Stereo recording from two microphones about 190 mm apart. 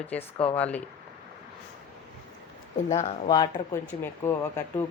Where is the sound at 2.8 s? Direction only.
20° left (ahead or behind).